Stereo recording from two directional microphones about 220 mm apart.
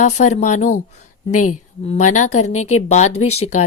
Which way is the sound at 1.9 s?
30° left (ahead or behind).